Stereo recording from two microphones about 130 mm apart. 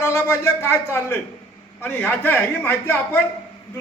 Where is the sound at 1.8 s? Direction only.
15° left (ahead or behind).